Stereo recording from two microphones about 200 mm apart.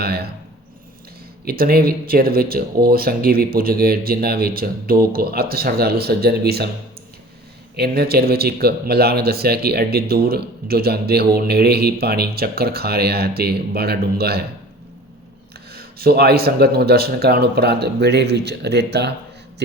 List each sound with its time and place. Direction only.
0.0 s speech: 50° right (ahead or behind)
1.5 s speech: 50° right (ahead or behind)
7.8 s speech: 50° right (ahead or behind)
15.7 s speech: 50° right (ahead or behind)